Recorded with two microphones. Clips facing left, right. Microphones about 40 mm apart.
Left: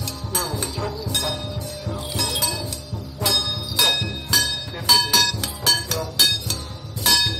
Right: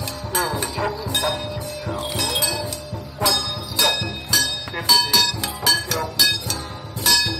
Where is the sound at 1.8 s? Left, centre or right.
Right.